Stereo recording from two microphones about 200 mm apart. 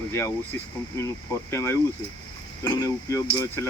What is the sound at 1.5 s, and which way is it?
Speech, 15° left (ahead or behind).